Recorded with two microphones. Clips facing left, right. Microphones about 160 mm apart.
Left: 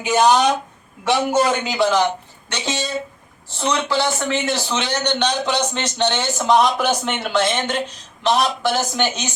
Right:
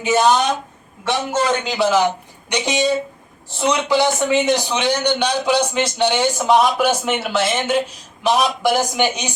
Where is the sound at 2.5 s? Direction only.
15° right (ahead or behind).